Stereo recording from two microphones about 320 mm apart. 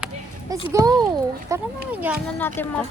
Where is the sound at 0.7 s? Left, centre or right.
Centre.